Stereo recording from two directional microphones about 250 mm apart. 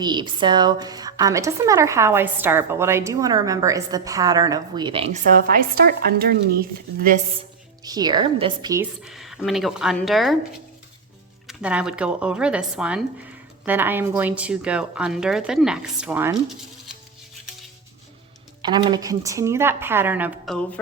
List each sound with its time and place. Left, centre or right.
0.0 s speech: centre; by 7.2 s right
7.9 s speech: centre
9.0 s speech: centre
11.4 s speech: centre
18.6 s speech: centre